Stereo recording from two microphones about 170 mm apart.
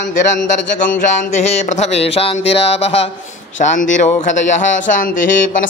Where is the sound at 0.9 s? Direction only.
45° left (ahead or behind).